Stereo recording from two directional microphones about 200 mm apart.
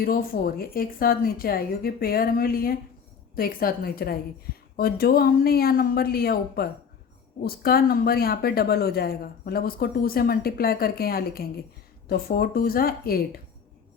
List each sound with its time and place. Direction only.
0.0 s a woman's voice: 45° left (ahead or behind)